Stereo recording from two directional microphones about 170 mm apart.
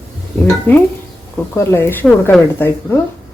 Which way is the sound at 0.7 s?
10° left (ahead or behind).